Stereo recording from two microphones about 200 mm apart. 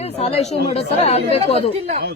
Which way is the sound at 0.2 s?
30° left (ahead or behind).